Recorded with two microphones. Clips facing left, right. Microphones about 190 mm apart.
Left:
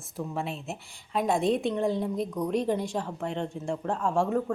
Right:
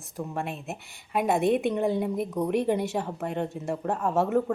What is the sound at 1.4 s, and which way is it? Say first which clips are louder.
Speech: right 3 dB; 60° right (ahead or behind).